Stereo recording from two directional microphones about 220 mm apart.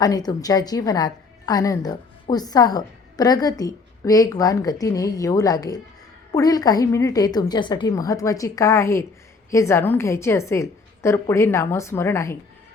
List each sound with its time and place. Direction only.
0.0 s a woman's voice: 15° left (ahead or behind)